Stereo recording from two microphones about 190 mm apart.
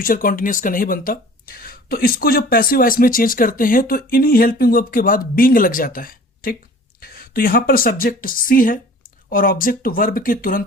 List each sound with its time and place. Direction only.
0.0 s speech: 50° left (ahead or behind)